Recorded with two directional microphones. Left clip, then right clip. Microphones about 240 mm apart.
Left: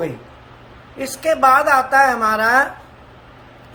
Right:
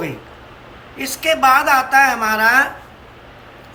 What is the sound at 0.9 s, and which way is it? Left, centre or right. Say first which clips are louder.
A man's voice: even; left.